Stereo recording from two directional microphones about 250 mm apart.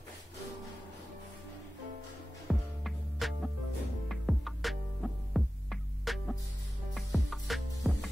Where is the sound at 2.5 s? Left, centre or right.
Centre.